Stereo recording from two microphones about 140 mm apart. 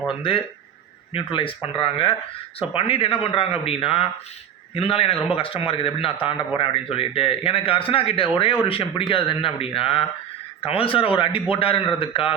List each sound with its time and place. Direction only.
0.2 s a man's voice: 40° left (ahead or behind)